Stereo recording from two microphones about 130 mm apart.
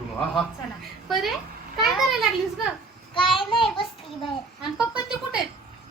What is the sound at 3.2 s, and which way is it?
Speech, 40° left (ahead or behind).